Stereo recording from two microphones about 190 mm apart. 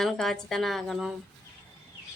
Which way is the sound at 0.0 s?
Centre (ahead or behind).